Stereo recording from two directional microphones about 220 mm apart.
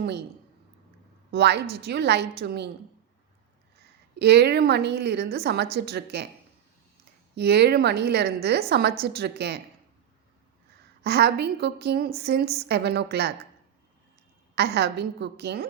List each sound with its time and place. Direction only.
0.0 s a woman's voice: 50° right (ahead or behind)
1.3 s a woman's voice: 50° right (ahead or behind)
4.2 s a woman's voice: 50° right (ahead or behind)
7.3 s a woman's voice: 50° right (ahead or behind)
11.0 s a woman's voice: 50° right (ahead or behind)
14.5 s a woman's voice: 50° right (ahead or behind)